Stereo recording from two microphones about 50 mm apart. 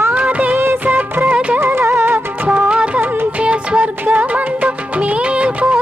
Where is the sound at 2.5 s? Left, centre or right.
Right.